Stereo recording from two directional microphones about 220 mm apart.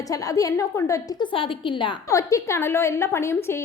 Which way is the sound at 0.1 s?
15° left (ahead or behind).